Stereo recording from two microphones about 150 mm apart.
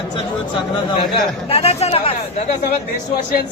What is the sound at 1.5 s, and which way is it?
Speech, 45° left (ahead or behind).